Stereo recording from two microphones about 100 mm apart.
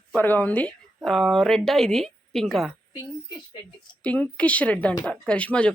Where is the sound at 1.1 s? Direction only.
Centre (ahead or behind).